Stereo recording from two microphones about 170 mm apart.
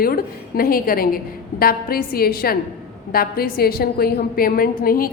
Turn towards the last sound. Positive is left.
turn(degrees=60)  # may be behind; listen again after turning